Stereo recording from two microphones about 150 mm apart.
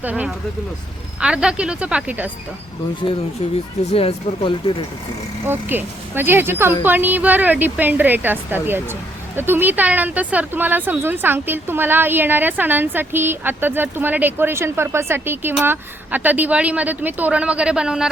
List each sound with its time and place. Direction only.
0.0 s speech: 10° right (ahead or behind)
3.9 s speech: 35° left (ahead or behind)
5.5 s speech: 15° right (ahead or behind)